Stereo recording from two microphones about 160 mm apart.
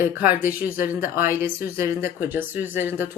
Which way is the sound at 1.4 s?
65° left (ahead or behind).